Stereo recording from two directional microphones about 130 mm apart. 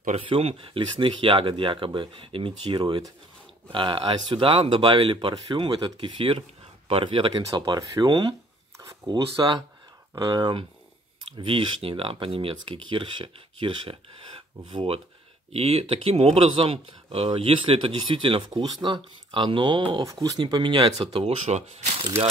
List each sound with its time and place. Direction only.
0.3 s speech: 45° right (ahead or behind)